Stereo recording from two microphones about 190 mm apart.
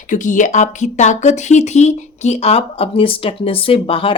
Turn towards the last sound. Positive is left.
turn(degrees=30)  # may be behind; listen again after turning